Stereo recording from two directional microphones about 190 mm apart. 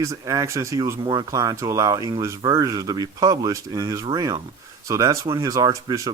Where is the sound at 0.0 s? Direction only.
15° right (ahead or behind).